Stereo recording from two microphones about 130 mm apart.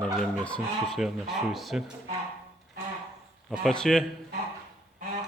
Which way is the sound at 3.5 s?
Centre (ahead or behind).